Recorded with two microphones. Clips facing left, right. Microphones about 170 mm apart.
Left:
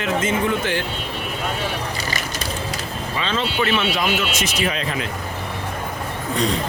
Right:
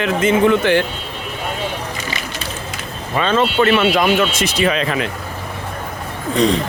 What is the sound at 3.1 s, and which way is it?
Speech, 55° right (ahead or behind).